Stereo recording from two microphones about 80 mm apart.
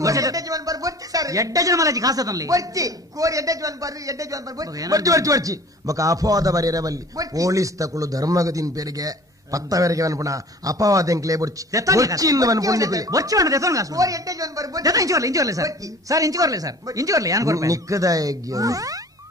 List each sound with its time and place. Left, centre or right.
0.0 s speech: right